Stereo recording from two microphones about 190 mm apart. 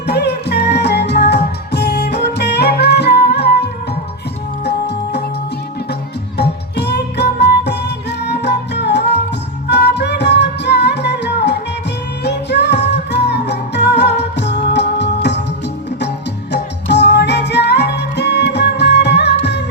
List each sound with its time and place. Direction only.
0.1 s music: 60° left (ahead or behind)